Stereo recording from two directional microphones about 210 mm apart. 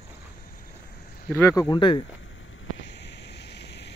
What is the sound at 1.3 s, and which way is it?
Speech, 15° left (ahead or behind).